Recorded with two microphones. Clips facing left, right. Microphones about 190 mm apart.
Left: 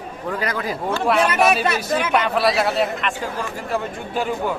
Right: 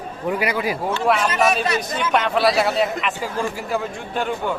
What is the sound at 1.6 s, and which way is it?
Speech, 65° left (ahead or behind).